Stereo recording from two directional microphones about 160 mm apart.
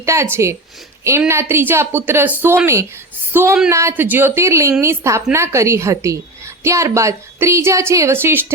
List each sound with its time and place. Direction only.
0.0 s a woman's voice: 15° right (ahead or behind)